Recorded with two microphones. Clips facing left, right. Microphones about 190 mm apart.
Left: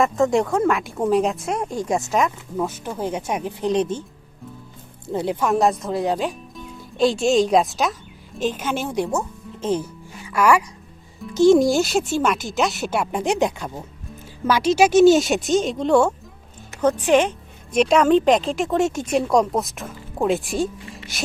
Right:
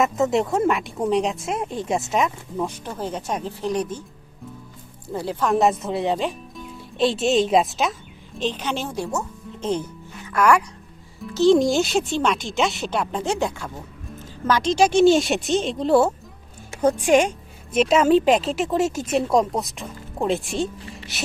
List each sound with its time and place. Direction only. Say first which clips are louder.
0.3 s a woman's voice: left 1 dB; 5° right (ahead or behind)
1.8 s speech: left 2 dB; 20° right (ahead or behind)
2.1 s speech: left 1 dB; centre (ahead or behind); by 4.0 s 25° left (ahead or behind)
5.0 s speech: left 3 dB; 20° left (ahead or behind)
5.5 s speech: right 1 dB; centre (ahead or behind); by 9.2 s 15° left (ahead or behind)
9.5 s music: left 1 dB; 5° left (ahead or behind)
11.3 s a woman's voice: left 2 dB; 10° left (ahead or behind)